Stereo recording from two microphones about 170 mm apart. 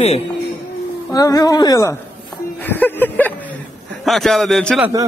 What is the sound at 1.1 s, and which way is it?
Speech, 20° left (ahead or behind).